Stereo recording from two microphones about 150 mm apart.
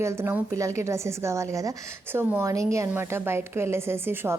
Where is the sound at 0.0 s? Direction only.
15° right (ahead or behind).